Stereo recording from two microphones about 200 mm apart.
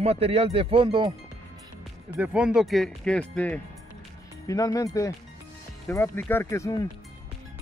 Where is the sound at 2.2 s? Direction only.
5° right (ahead or behind).